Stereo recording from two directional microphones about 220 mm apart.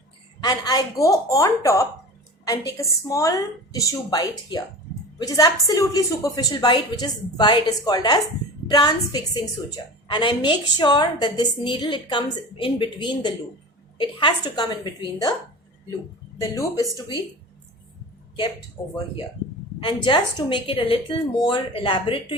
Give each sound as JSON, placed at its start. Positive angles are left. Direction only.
{"t": 0.4, "sound": "a woman's voice", "side_deg": 15}
{"t": 16.4, "sound": "a woman's voice", "side_deg": 15}
{"t": 18.8, "sound": "a woman's voice", "side_deg": 15}
{"t": 20.1, "sound": "a woman's voice", "side_deg": 20}